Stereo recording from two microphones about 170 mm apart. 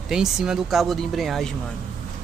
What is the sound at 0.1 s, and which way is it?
Speech, 5° right (ahead or behind).